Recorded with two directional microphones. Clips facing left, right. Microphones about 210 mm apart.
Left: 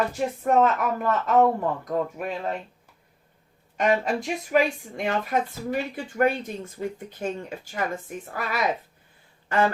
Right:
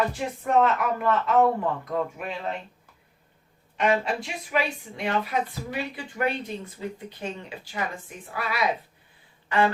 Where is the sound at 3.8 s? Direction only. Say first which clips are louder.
Left 1 dB; 40° left (ahead or behind).